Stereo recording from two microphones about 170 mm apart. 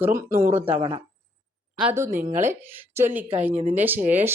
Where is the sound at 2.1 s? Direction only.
45° right (ahead or behind).